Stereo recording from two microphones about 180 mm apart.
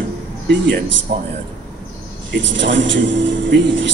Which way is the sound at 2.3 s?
90° right.